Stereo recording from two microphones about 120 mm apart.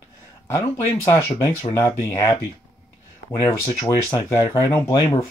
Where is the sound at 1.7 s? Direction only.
25° left (ahead or behind).